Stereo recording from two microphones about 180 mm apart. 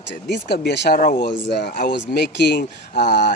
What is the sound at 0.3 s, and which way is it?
Speech, 65° left (ahead or behind).